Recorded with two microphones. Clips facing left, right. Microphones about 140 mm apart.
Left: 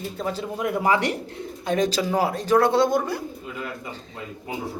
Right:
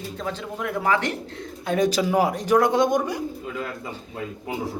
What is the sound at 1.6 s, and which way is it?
Speech, 5° right (ahead or behind).